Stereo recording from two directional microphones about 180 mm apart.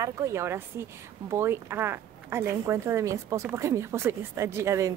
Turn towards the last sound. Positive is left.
turn(degrees=-15)  # may be behind; listen again after turning